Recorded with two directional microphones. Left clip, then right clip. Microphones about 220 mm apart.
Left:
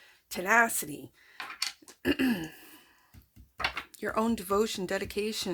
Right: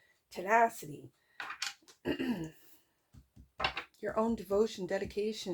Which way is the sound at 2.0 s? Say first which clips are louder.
Left 7 dB; 45° left (ahead or behind).